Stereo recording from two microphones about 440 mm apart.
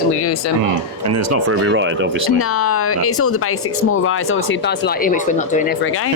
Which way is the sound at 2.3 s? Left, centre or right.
Left.